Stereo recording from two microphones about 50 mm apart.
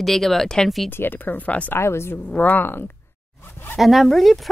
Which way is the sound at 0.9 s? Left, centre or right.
Left.